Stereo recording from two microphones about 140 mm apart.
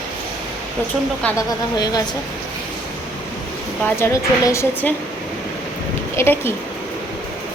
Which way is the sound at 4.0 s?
20° left (ahead or behind).